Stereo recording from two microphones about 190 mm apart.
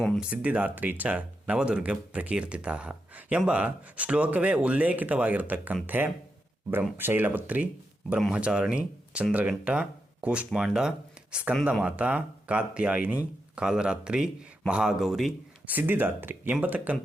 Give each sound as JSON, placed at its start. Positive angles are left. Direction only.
{"t": 0.0, "sound": "speech", "side_deg": 0}